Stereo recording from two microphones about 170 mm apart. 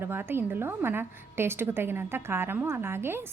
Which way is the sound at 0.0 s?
15° right (ahead or behind).